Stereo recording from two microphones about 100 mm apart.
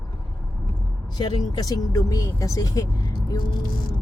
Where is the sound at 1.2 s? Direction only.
45° left (ahead or behind).